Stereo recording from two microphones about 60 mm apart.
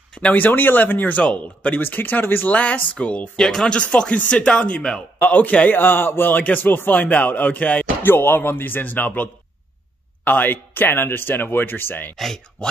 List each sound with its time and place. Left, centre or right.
0.1 s speech: left
1.2 s speech: centre
5.8 s a man's voice: left